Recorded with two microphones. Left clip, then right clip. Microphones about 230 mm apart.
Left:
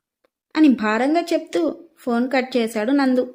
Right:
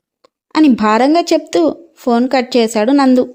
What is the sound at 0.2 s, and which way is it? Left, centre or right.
A woman's voice, right.